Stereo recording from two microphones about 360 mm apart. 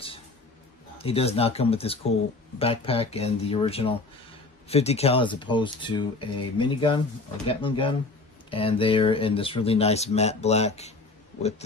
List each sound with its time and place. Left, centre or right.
0.9 s speech: centre